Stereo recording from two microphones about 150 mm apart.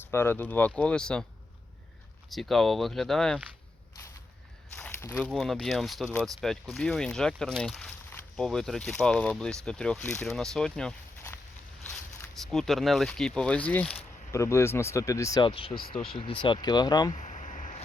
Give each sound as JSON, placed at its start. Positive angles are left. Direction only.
{"t": 0.1, "sound": "speech", "side_deg": 15}
{"t": 2.3, "sound": "speech", "side_deg": 0}
{"t": 4.8, "sound": "a sound", "side_deg": 15}
{"t": 5.3, "sound": "speech", "side_deg": 5}
{"t": 12.3, "sound": "speech", "side_deg": 0}
{"t": 15.4, "sound": "speech", "side_deg": 35}
{"t": 17.2, "sound": "a sound", "side_deg": 50}